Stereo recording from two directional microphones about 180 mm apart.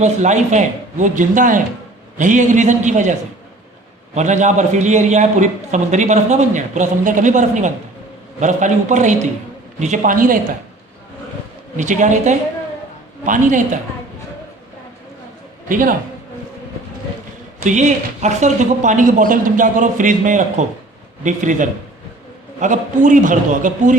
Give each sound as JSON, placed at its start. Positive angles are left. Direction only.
{"t": 0.0, "sound": "a man's voice", "side_deg": -40}
{"t": 11.8, "sound": "speech", "side_deg": -45}
{"t": 15.7, "sound": "speech", "side_deg": -50}
{"t": 17.6, "sound": "speech", "side_deg": -40}